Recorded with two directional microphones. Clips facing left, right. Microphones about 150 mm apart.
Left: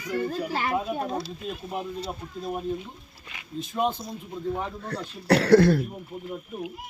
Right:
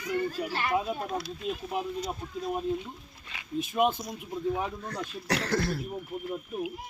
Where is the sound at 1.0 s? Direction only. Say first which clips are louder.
Left 3 dB; 25° left (ahead or behind).